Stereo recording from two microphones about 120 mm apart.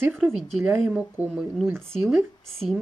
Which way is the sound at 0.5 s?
10° right (ahead or behind).